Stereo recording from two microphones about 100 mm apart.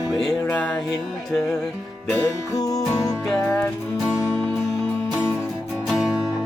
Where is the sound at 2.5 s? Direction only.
35° left (ahead or behind).